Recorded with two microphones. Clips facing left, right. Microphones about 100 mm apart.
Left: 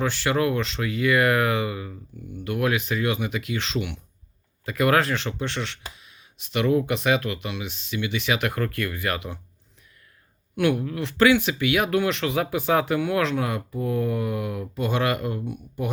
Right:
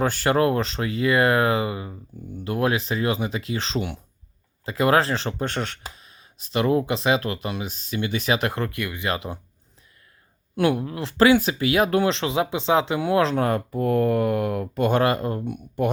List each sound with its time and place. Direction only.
0.0 s speech: 45° right (ahead or behind); by 9.3 s 25° right (ahead or behind)
10.5 s speech: 35° right (ahead or behind)
13.3 s speech: 45° right (ahead or behind)
15.0 s speech: 35° right (ahead or behind)
15.4 s speech: 60° right (ahead or behind)